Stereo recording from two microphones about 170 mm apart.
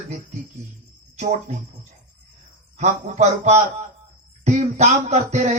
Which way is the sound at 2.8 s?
45° right (ahead or behind).